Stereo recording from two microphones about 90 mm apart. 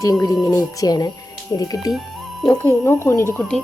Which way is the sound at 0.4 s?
30° left (ahead or behind).